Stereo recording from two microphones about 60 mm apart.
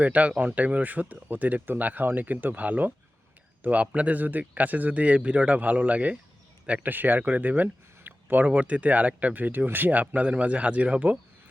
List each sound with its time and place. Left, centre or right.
0.0 s speech: right